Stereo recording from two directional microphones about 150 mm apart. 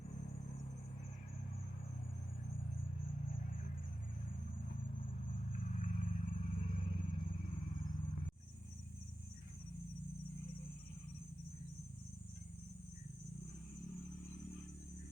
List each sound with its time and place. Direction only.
5.5 s vehicle: 55° left (ahead or behind)